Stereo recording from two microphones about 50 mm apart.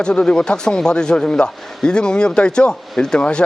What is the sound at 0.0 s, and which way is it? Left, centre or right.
A man's voice, centre.